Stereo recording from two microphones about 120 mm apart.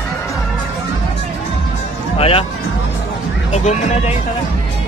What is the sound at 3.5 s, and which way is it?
Speech, 70° left (ahead or behind).